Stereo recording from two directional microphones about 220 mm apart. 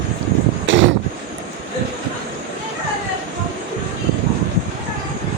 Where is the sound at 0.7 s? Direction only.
60° right (ahead or behind).